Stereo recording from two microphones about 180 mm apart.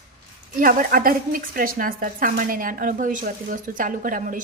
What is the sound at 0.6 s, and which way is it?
A woman's voice, 50° right (ahead or behind).